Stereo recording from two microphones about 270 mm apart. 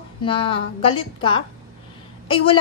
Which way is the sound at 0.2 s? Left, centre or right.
Centre.